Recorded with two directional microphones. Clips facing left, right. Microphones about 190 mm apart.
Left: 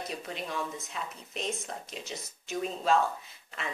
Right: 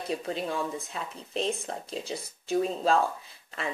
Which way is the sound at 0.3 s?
30° right (ahead or behind).